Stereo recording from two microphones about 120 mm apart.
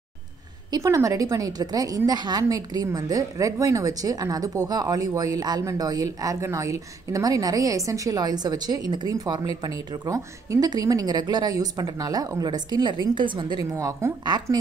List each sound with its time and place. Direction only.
0.8 s a woman's voice: 25° right (ahead or behind); by 13.6 s 40° right (ahead or behind)
13.7 s a woman's voice: 30° right (ahead or behind)